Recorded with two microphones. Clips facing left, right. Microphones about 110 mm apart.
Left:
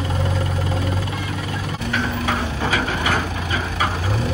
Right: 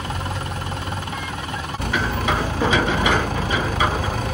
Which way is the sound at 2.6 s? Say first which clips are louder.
Right 3 dB; 15° right (ahead or behind).